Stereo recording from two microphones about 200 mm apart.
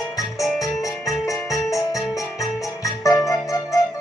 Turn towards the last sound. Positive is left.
turn(degrees=15)  # may be behind; listen again after turning